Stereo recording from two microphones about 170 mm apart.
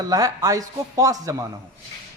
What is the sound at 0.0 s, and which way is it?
Speech, 20° right (ahead or behind).